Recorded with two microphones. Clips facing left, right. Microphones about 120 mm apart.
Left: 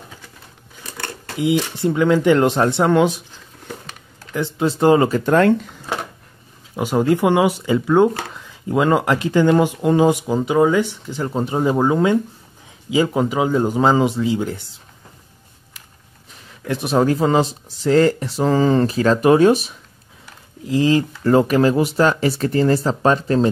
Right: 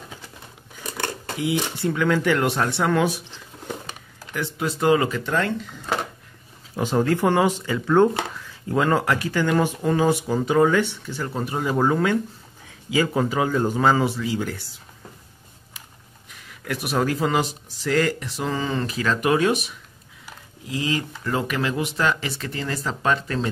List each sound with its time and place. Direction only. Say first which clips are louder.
0.8 s a sound: right 2 dB; 15° right (ahead or behind)
1.4 s speech: left 6 dB; 20° left (ahead or behind)
4.3 s speech: left 6 dB; 25° left (ahead or behind)
5.2 s speech: left 10 dB; 55° left (ahead or behind)
6.8 s speech: left 4 dB; 15° left (ahead or behind)
16.4 s speech: left 5 dB; 25° left (ahead or behind)